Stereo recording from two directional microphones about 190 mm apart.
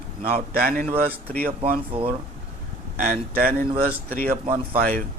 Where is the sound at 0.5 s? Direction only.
50° right (ahead or behind).